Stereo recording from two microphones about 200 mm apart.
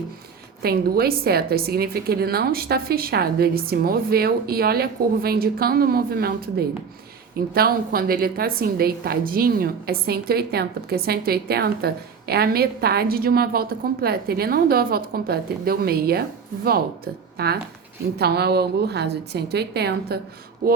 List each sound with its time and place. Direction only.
0.6 s a woman's voice: 50° right (ahead or behind)
17.3 s a woman's voice: 50° right (ahead or behind)